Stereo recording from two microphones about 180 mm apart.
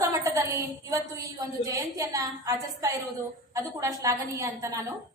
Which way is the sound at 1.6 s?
20° right (ahead or behind).